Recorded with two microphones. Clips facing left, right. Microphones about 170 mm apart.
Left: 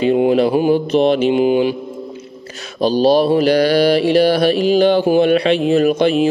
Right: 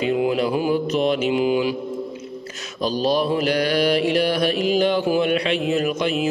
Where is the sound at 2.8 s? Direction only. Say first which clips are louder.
Left 8 dB; 30° left (ahead or behind).